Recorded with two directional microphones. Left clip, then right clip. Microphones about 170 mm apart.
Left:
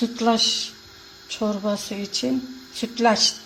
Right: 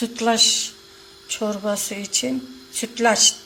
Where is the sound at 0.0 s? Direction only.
10° left (ahead or behind).